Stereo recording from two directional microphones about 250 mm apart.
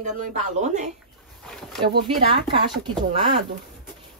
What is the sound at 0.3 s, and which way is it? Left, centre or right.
Speech, right.